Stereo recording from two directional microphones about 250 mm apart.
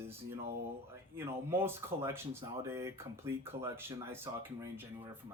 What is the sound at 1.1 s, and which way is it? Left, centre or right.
Speech, centre.